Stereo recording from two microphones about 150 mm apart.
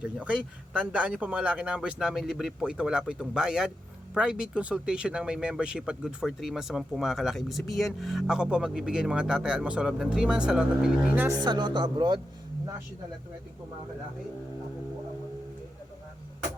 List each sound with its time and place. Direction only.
0.0 s speech: 10° right (ahead or behind)
11.3 s speech: 30° right (ahead or behind)